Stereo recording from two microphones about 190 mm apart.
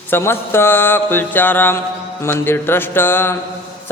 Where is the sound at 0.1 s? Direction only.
10° left (ahead or behind).